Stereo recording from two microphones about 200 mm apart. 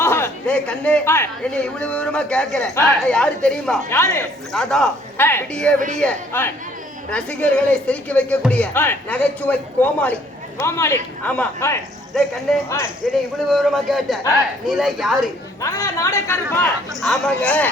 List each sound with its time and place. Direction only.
0.0 s speech: 10° left (ahead or behind)
4.5 s speech: 5° left (ahead or behind)
13.0 s speech: centre (ahead or behind)
15.6 s speech: 15° left (ahead or behind)
17.0 s speech: 5° left (ahead or behind)